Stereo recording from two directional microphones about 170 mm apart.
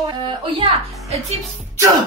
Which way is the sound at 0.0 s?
30° right (ahead or behind).